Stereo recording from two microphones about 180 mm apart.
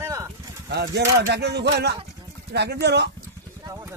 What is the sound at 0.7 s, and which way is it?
Speech, 65° right (ahead or behind).